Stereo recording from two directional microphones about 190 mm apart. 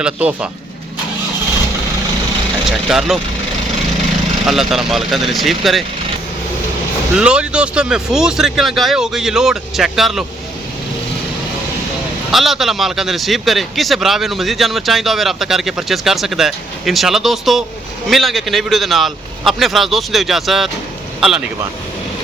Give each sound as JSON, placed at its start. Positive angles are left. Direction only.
{"t": 0.0, "sound": "speech", "side_deg": -5}
{"t": 2.6, "sound": "a man's voice", "side_deg": 0}
{"t": 4.4, "sound": "a man's voice", "side_deg": 0}
{"t": 7.2, "sound": "a man's voice", "side_deg": -5}
{"t": 12.3, "sound": "a man's voice", "side_deg": 0}